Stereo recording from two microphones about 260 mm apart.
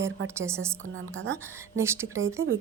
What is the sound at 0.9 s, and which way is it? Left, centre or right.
Speech, right.